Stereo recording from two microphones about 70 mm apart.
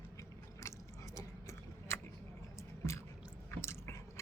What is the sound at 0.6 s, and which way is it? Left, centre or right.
Gears, left.